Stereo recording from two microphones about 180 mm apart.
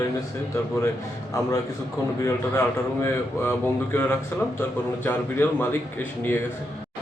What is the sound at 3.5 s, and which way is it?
A man's voice, 10° left (ahead or behind).